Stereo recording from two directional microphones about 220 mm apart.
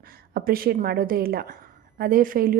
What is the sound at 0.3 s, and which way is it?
A woman's voice, 40° right (ahead or behind).